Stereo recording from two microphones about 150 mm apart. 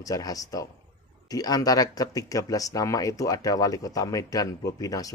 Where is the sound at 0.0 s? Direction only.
25° left (ahead or behind).